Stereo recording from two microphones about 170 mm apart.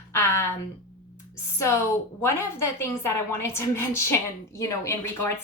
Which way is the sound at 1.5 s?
15° left (ahead or behind).